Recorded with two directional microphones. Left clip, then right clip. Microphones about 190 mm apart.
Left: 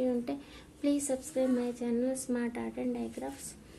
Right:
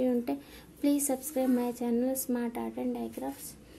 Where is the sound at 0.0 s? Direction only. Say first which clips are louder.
Right 2 dB; 25° right (ahead or behind).